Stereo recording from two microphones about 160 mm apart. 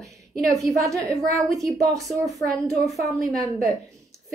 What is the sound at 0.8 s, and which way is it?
A woman's voice, 20° right (ahead or behind).